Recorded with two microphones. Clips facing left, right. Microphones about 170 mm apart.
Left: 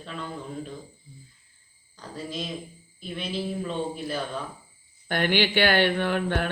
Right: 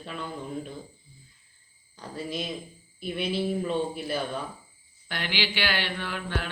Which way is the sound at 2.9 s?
5° right (ahead or behind).